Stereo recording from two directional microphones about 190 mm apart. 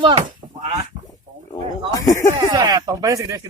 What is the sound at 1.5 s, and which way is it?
Wild animals, 20° left (ahead or behind).